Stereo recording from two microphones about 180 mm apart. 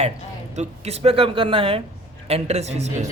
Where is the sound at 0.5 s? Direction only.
35° right (ahead or behind).